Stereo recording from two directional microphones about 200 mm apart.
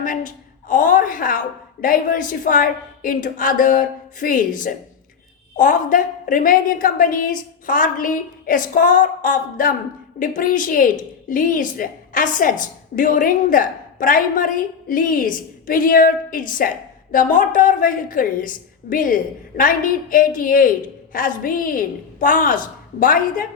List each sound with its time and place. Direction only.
0.0 s a woman's voice: 40° left (ahead or behind)